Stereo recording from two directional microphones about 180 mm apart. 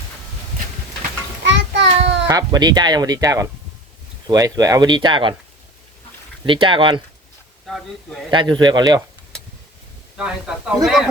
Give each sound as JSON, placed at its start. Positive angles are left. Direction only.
{"t": 1.5, "sound": "child singing", "side_deg": -85}
{"t": 2.2, "sound": "speech", "side_deg": -20}
{"t": 6.4, "sound": "speech", "side_deg": -30}
{"t": 8.3, "sound": "speech", "side_deg": -25}
{"t": 10.2, "sound": "speech", "side_deg": -5}